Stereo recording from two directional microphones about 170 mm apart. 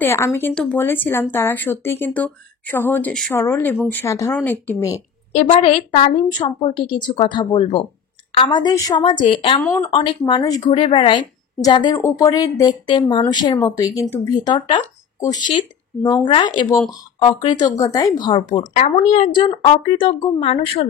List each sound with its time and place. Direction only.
0.0 s speech: 15° left (ahead or behind)
3.3 s speech: 15° left (ahead or behind)
5.3 s a woman's voice: 40° left (ahead or behind)
9.6 s speech: 15° left (ahead or behind)
9.8 s a woman's voice: 30° left (ahead or behind)
18.6 s speech: 50° left (ahead or behind)
19.3 s a woman's voice: 30° left (ahead or behind)